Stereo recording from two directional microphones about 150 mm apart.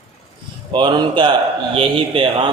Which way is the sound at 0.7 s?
30° right (ahead or behind).